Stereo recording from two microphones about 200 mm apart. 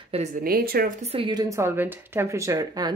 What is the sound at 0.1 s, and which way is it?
Speech, 35° right (ahead or behind).